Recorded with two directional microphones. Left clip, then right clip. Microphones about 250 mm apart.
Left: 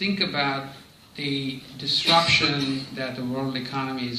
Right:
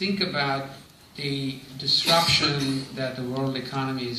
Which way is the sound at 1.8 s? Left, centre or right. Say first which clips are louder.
Even; left.